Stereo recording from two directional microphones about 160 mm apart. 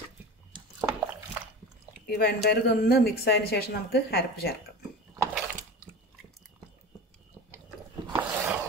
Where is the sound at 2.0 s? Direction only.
75° left (ahead or behind).